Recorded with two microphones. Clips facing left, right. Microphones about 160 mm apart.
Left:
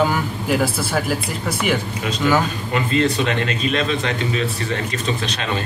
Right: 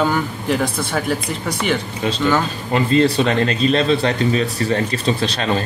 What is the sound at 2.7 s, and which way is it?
Speech, 35° right (ahead or behind).